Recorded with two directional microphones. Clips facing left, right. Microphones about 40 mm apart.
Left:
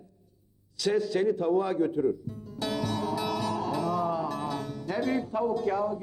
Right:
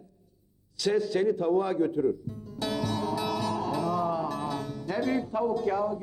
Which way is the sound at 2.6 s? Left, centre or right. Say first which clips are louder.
Even; left.